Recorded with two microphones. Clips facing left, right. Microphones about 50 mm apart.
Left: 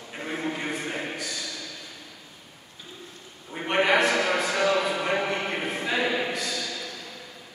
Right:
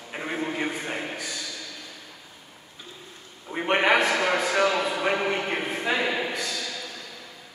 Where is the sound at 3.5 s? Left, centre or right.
Right.